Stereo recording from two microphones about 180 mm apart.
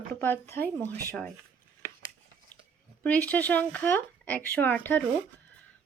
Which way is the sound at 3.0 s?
10° left (ahead or behind).